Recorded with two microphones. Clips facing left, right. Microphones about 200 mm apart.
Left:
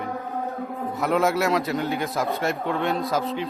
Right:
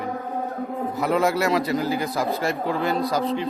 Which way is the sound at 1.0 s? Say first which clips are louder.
Even; centre (ahead or behind).